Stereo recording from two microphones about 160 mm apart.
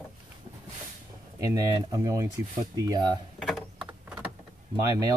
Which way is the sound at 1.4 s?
20° right (ahead or behind).